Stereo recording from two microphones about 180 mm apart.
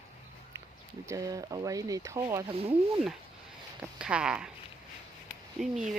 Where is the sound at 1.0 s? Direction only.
20° right (ahead or behind).